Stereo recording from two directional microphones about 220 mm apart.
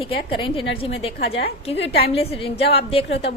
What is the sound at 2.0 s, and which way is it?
A woman's voice, 25° left (ahead or behind).